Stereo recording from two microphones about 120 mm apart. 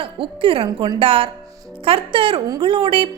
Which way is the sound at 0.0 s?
50° right (ahead or behind).